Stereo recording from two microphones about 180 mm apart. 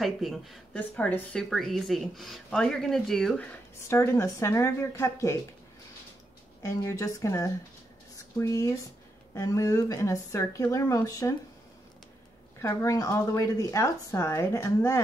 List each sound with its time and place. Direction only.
0.0 s speech: centre (ahead or behind)
3.9 s a woman's voice: 15° left (ahead or behind)
6.6 s a woman's voice: 15° left (ahead or behind)
12.6 s a woman's voice: 15° left (ahead or behind)